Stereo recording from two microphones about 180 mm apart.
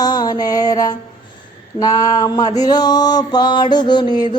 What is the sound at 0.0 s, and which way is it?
Music, 20° left (ahead or behind).